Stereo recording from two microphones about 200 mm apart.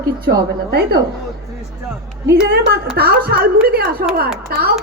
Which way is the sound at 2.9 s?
50° right (ahead or behind).